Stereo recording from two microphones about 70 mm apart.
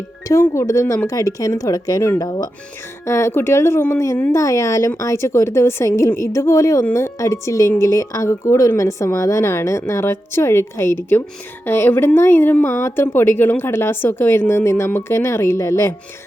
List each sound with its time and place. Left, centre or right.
0.5 s speech: left
2.1 s speech: left
3.0 s a woman's voice: left
4.3 s a woman's voice: left